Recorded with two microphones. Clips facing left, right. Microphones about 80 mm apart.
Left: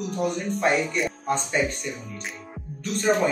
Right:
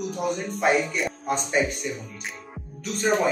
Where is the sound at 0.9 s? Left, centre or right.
Centre.